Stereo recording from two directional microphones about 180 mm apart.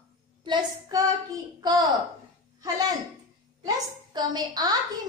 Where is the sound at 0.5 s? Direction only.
20° right (ahead or behind).